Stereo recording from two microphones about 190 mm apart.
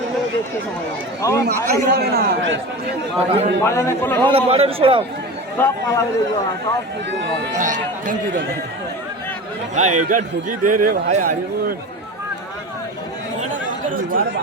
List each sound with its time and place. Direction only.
1.2 s speech: 15° left (ahead or behind)
1.5 s a man's voice: 60° right (ahead or behind)
3.2 s a man's voice: 30° right (ahead or behind)
3.6 s speech: 15° left (ahead or behind)
4.3 s a man's voice: 30° right (ahead or behind)
5.5 s speech: 10° left (ahead or behind)
7.5 s a man's voice: 45° right (ahead or behind)
9.7 s a man's voice: 40° right (ahead or behind)
13.4 s chatter: 45° right (ahead or behind)